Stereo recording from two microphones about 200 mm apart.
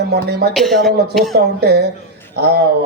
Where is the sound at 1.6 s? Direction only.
55° right (ahead or behind).